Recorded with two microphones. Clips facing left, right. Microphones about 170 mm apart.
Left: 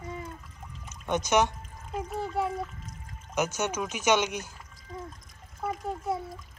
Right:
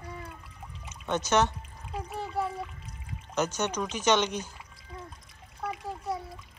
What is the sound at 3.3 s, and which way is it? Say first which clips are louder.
Speech: even; 10° left (ahead or behind).